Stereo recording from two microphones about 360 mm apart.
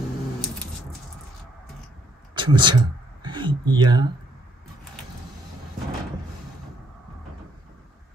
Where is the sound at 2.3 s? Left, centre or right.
Centre.